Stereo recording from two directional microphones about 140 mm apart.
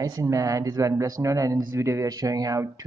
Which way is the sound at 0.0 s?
25° right (ahead or behind).